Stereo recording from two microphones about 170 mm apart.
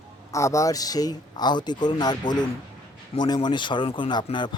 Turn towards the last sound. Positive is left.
turn(degrees=25)  # may be behind; listen again after turning